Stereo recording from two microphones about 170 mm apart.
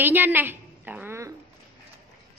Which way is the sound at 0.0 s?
10° right (ahead or behind).